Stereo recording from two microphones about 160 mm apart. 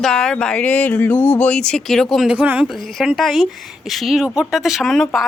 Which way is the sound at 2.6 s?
Centre (ahead or behind).